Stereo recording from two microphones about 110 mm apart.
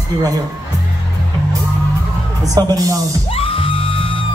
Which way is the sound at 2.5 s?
35° right (ahead or behind).